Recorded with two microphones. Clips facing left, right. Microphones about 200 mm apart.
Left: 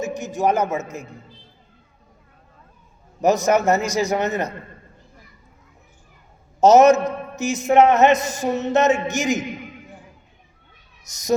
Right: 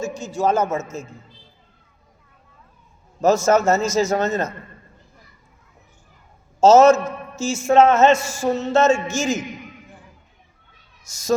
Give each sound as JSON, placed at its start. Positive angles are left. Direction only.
{"t": 0.0, "sound": "a man's voice", "side_deg": 20}
{"t": 3.2, "sound": "a man's voice", "side_deg": 15}
{"t": 6.6, "sound": "a man's voice", "side_deg": 15}
{"t": 11.1, "sound": "speech", "side_deg": 20}